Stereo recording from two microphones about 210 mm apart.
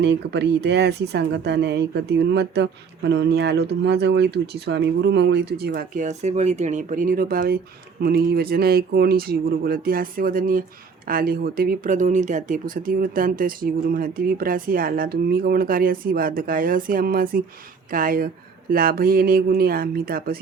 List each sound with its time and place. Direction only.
0.0 s speech: 55° right (ahead or behind)